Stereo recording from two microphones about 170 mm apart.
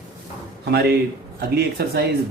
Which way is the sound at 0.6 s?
70° right (ahead or behind).